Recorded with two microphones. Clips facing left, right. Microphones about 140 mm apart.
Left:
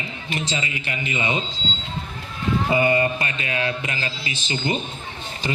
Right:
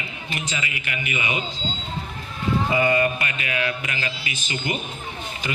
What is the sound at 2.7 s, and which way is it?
A man's voice, 25° left (ahead or behind).